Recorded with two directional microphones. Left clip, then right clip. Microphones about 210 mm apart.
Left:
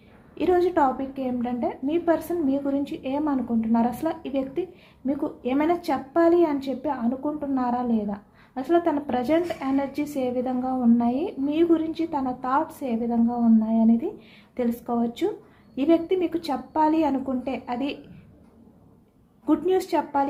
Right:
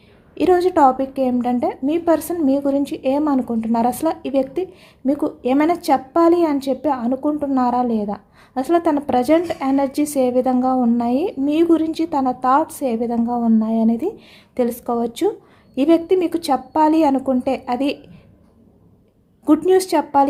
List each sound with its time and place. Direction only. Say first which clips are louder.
0.3 s a woman's voice: right 6 dB; 50° right (ahead or behind)
19.5 s a woman's voice: right 8 dB; 50° right (ahead or behind)